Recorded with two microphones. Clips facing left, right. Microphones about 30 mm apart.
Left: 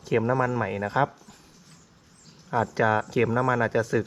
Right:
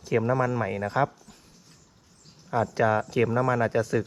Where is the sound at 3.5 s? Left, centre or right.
Left.